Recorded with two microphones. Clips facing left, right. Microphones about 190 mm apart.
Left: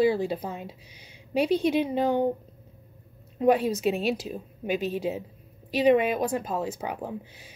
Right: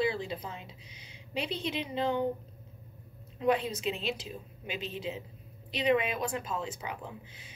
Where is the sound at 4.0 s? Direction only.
45° left (ahead or behind).